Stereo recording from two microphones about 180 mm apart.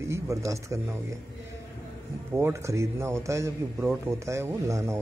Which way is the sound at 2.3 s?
15° right (ahead or behind).